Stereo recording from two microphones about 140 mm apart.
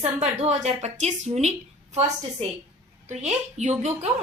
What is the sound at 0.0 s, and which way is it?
A woman's voice, 55° right (ahead or behind).